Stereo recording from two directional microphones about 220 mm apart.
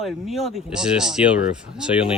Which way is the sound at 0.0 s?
Centre (ahead or behind).